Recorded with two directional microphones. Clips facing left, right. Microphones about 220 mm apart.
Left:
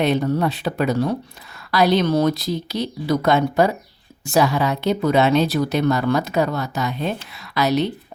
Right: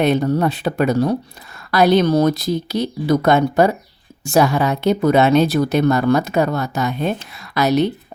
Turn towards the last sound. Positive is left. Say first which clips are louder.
# right 3 dB
turn(degrees=-45)  # may be behind; listen again after turning